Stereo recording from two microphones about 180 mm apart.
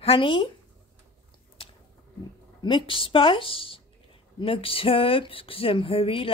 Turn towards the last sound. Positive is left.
turn(degrees=30)  # may be behind; listen again after turning